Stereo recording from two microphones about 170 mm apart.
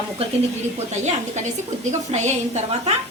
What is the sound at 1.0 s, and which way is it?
A woman's voice, 40° right (ahead or behind).